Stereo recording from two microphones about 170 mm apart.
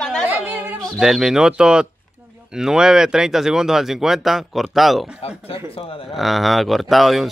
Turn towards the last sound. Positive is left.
turn(degrees=0)  # may be behind; listen again after turning